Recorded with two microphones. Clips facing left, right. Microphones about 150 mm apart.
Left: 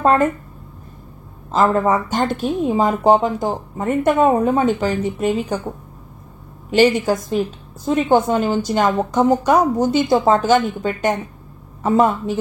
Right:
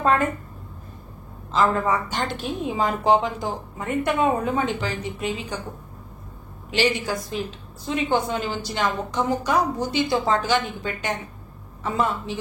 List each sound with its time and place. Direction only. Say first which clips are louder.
0.0 s a woman's voice: left 6 dB; 45° left (ahead or behind)
1.5 s speech: left 5 dB; 45° left (ahead or behind)
6.7 s speech: left 9 dB; 45° left (ahead or behind)